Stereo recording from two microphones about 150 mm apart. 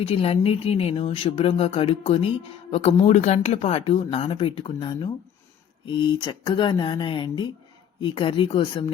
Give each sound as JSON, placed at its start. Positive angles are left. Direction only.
{"t": 0.0, "sound": "speech", "side_deg": 40}